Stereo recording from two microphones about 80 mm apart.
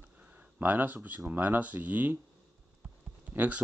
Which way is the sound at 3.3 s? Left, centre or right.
Right.